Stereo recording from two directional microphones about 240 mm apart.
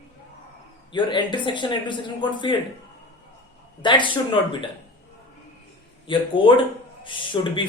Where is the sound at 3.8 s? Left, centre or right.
Centre.